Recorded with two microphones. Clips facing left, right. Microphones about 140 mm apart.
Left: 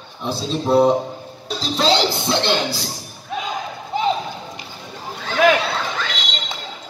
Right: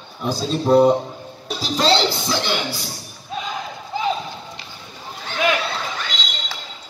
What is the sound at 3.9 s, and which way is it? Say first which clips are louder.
Clip-clop: left 3 dB; 20° left (ahead or behind).